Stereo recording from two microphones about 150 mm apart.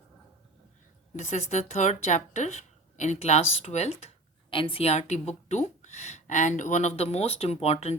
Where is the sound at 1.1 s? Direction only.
45° left (ahead or behind).